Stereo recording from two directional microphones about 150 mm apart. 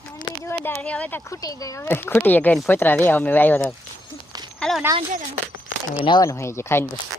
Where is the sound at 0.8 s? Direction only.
10° left (ahead or behind).